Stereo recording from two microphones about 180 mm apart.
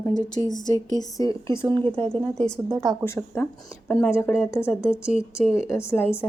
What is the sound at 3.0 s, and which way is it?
Speech, 15° left (ahead or behind).